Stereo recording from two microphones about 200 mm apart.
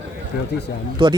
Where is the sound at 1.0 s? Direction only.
25° right (ahead or behind).